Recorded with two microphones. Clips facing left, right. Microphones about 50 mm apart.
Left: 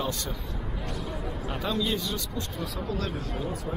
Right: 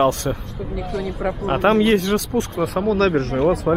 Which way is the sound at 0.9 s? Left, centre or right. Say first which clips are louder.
Right 12 dB; right.